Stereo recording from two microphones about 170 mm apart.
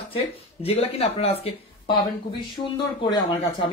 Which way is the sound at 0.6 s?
35° left (ahead or behind).